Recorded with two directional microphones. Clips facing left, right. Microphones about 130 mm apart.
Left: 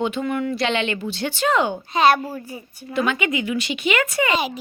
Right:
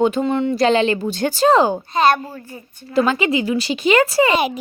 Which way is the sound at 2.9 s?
35° right (ahead or behind).